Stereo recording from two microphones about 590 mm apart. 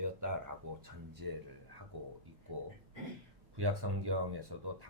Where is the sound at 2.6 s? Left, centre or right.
Right.